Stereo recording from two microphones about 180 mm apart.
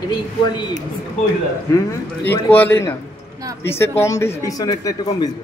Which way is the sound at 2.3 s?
10° left (ahead or behind).